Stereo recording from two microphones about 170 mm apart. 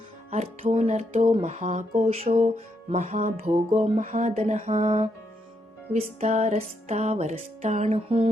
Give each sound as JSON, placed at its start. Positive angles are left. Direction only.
{"t": 0.3, "sound": "music", "side_deg": -40}